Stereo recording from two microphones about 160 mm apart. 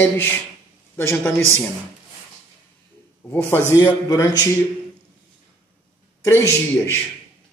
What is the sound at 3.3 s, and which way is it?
A man's voice, 10° left (ahead or behind).